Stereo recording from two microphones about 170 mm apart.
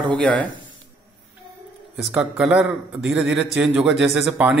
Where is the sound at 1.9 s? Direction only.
5° right (ahead or behind).